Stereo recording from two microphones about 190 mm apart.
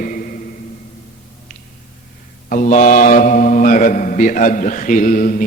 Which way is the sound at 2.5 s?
40° left (ahead or behind).